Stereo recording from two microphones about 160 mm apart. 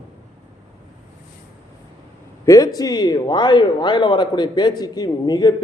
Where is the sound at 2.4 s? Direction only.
20° left (ahead or behind).